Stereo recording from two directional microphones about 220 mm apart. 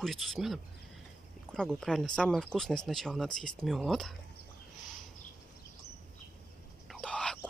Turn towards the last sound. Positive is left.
turn(degrees=5)  # may be behind; listen again after turning